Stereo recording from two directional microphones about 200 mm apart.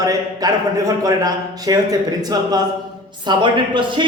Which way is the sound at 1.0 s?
20° right (ahead or behind).